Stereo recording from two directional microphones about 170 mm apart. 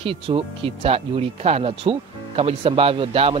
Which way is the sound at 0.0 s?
30° right (ahead or behind).